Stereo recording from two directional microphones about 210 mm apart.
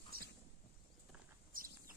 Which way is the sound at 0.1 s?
45° right (ahead or behind).